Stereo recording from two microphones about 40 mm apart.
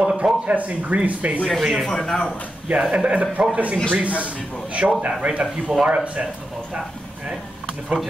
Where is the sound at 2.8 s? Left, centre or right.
Right.